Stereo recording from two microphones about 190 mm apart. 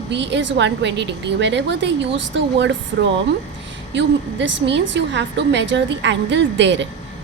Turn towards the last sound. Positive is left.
turn(degrees=-70)  # may be behind; listen again after turning